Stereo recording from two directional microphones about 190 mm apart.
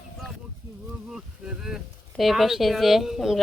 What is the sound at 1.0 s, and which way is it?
Speech, 5° right (ahead or behind).